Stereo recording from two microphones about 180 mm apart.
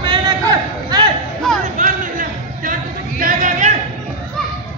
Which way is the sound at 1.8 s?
50° right (ahead or behind).